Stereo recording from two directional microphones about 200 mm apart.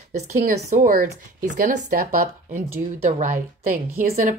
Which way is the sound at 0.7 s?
45° right (ahead or behind).